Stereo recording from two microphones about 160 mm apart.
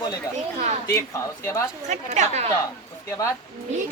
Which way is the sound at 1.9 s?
45° right (ahead or behind).